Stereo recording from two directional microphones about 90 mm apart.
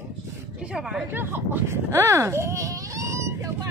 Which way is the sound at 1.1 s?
25° right (ahead or behind).